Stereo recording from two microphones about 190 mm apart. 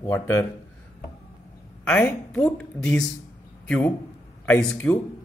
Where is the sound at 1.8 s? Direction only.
10° left (ahead or behind).